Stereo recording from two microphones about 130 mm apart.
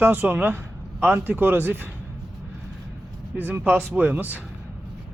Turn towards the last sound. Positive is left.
turn(degrees=-15)  # may be behind; listen again after turning